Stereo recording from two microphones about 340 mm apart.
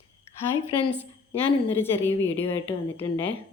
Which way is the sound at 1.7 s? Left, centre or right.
Centre.